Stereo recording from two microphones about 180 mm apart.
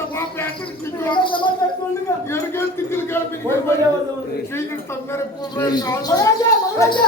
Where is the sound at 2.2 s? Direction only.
15° left (ahead or behind).